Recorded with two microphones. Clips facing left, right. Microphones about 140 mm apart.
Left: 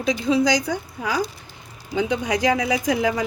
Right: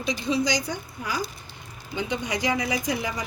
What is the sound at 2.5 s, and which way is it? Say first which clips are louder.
Speech: left 5 dB; 85° left.